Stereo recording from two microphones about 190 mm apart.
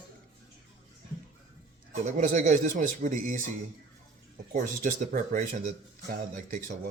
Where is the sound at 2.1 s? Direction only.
40° right (ahead or behind).